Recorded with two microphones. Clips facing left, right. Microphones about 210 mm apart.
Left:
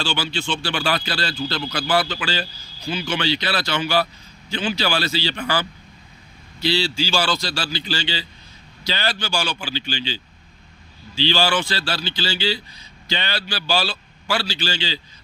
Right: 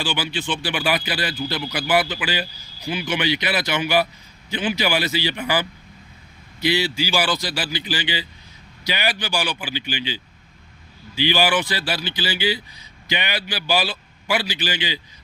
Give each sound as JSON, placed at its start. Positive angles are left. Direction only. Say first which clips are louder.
{"t": 0.0, "sound": "speech", "louder": "even", "side_deg": -15}